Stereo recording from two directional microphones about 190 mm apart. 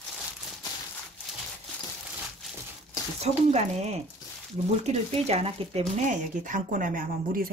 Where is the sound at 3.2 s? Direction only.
35° right (ahead or behind).